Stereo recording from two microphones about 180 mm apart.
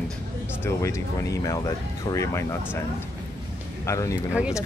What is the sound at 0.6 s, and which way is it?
Speech, 15° left (ahead or behind).